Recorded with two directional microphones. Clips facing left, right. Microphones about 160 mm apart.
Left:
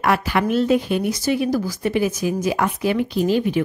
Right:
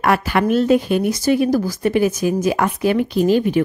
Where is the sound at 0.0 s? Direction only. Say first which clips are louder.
Right 2 dB; 50° right (ahead or behind).